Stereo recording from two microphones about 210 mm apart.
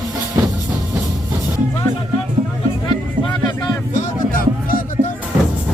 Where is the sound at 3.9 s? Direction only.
40° left (ahead or behind).